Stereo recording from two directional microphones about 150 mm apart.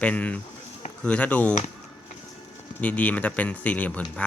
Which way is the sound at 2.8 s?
10° left (ahead or behind).